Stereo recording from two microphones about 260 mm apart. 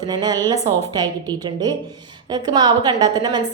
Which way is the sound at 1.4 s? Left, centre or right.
Centre.